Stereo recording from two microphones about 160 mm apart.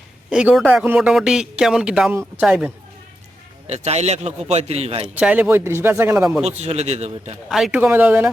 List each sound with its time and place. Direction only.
0.3 s speech: 5° right (ahead or behind)
3.7 s a man's voice: 45° right (ahead or behind)
5.0 s speech: 5° right (ahead or behind)
6.4 s a man's voice: 45° right (ahead or behind)
7.5 s speech: 5° right (ahead or behind)